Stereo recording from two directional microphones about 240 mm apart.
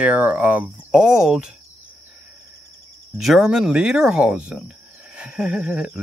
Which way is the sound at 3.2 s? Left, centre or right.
Centre.